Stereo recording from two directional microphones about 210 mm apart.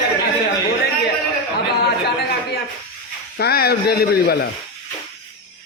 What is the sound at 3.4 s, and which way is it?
A man's voice, 50° left (ahead or behind).